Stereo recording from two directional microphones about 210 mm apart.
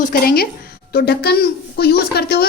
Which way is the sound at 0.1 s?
45° left (ahead or behind).